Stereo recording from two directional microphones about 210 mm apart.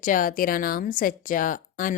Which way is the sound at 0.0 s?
40° left (ahead or behind).